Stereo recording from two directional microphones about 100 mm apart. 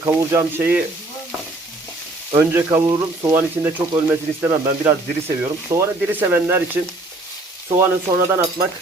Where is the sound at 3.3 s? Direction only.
25° right (ahead or behind).